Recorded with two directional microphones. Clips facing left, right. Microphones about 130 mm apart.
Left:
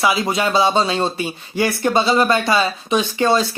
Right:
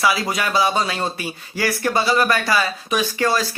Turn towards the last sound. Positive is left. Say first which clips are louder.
# left 3 dB
turn(degrees=25)  # may be behind; listen again after turning